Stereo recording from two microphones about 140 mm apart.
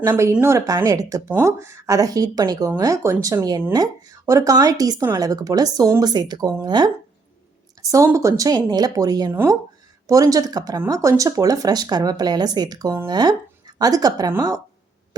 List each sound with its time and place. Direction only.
0.1 s speech: 15° right (ahead or behind)
9.3 s speech: 15° right (ahead or behind)